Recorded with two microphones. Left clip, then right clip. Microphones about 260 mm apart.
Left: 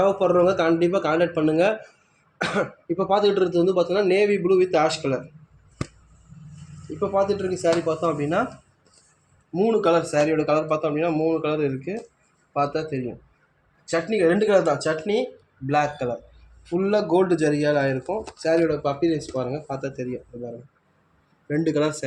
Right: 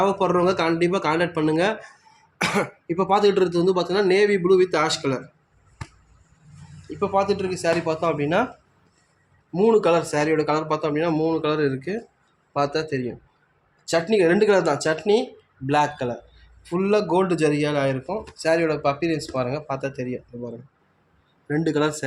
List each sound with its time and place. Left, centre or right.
0.0 s speech: right
7.0 s speech: right
9.5 s speech: right
21.4 s speech: right